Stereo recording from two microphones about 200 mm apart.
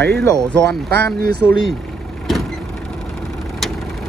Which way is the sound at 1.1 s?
50° right (ahead or behind).